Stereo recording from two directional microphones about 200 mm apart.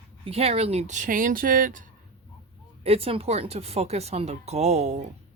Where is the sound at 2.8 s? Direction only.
30° right (ahead or behind).